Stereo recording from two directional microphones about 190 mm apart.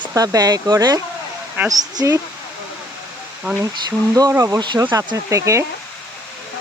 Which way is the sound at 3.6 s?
20° right (ahead or behind).